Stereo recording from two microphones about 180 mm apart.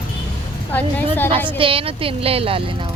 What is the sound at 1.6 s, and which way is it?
Speech, 30° right (ahead or behind).